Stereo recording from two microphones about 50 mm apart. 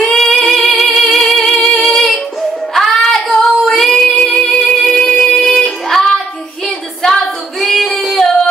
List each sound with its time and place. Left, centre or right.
0.0 s music: centre
2.7 s child singing: centre
4.5 s music: centre
5.4 s child singing: centre
7.6 s singing: centre